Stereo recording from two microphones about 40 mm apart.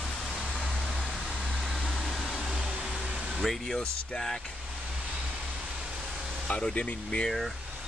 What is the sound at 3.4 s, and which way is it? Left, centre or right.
Speech, centre.